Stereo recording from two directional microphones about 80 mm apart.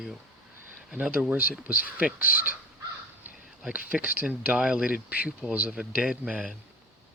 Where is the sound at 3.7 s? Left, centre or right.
Centre.